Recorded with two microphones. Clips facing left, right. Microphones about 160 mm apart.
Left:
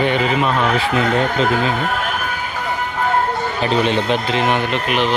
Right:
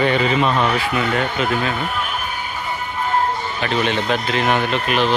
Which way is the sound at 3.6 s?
30° left (ahead or behind).